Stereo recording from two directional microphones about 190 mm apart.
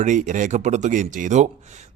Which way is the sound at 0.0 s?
40° right (ahead or behind).